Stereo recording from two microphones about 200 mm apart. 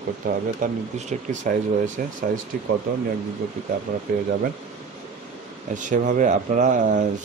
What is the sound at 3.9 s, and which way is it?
Speech, 50° right (ahead or behind).